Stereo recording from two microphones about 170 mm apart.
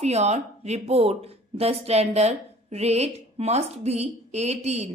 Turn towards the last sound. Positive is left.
turn(degrees=-40)  # may be behind; listen again after turning